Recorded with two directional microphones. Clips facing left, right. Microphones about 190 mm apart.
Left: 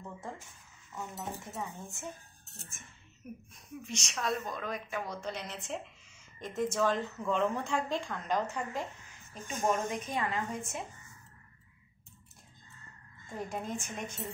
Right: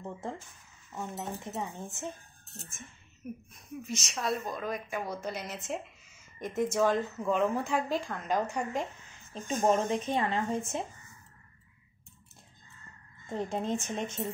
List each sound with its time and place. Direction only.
0.0 s speech: 25° right (ahead or behind)
3.8 s a woman's voice: 5° right (ahead or behind)
9.3 s speech: 30° right (ahead or behind)
13.3 s speech: 25° right (ahead or behind)